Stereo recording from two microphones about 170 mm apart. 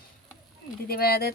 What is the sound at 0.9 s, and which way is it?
Speech, 65° left (ahead or behind).